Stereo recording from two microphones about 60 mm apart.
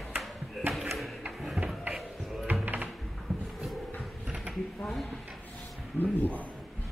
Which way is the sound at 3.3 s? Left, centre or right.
Centre.